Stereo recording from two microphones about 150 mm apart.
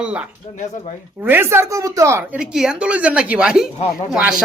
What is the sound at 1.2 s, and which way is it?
A woman's voice, 15° right (ahead or behind).